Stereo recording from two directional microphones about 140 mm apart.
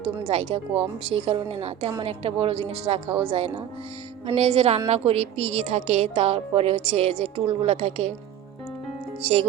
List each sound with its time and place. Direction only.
0.3 s a woman's voice: 45° right (ahead or behind)
9.2 s a woman's voice: 45° right (ahead or behind)